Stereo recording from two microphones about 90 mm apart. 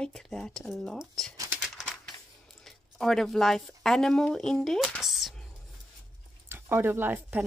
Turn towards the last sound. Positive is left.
turn(degrees=-20)  # may be behind; listen again after turning